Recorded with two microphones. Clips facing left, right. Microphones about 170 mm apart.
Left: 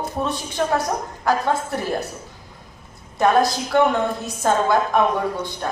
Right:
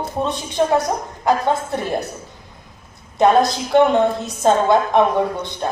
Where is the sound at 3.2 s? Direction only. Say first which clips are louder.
Right 3 dB; 20° right (ahead or behind).